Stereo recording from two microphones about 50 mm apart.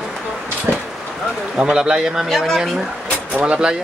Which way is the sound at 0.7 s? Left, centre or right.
Right.